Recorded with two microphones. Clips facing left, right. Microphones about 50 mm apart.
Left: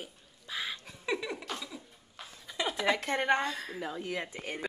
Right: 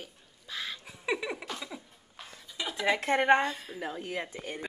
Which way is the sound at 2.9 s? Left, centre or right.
Centre.